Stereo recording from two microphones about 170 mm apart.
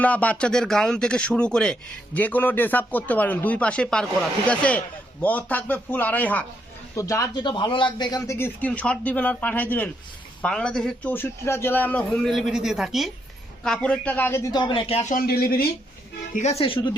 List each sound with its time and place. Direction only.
0.0 s a man's voice: 10° left (ahead or behind); by 15.0 s 35° left (ahead or behind)
15.1 s speech: 60° left (ahead or behind)
16.3 s speech: 40° left (ahead or behind)